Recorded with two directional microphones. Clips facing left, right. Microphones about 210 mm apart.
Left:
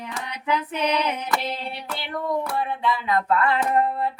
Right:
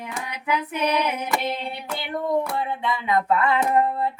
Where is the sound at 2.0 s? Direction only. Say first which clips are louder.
Right 3 dB; 20° right (ahead or behind).